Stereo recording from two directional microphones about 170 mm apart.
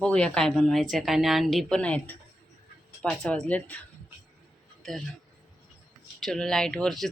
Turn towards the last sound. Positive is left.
turn(degrees=0)  # may be behind; listen again after turning